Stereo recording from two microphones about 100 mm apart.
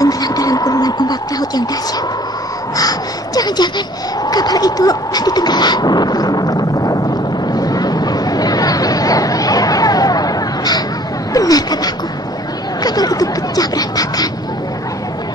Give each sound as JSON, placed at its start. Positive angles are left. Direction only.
{"t": 0.0, "sound": "speech", "side_deg": 40}
{"t": 2.8, "sound": "a child's voice", "side_deg": 40}
{"t": 7.5, "sound": "a sound", "side_deg": 40}
{"t": 12.8, "sound": "speech", "side_deg": 40}